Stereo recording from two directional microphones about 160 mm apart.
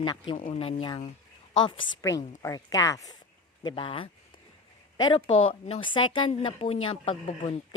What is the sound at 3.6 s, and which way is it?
Speech, 30° left (ahead or behind).